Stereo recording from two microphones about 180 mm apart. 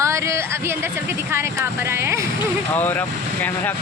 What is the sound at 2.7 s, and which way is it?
Speech, 10° left (ahead or behind).